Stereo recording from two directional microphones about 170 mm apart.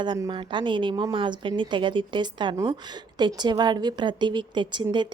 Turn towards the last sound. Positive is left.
turn(degrees=-25)  # may be behind; listen again after turning